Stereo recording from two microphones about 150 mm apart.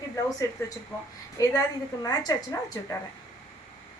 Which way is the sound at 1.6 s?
25° left (ahead or behind).